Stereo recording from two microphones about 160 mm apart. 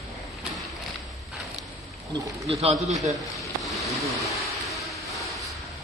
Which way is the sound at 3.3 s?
Centre (ahead or behind).